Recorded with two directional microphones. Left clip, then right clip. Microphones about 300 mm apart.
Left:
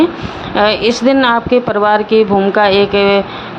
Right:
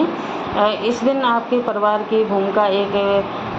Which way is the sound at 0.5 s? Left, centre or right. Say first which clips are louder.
Left 7 dB; left.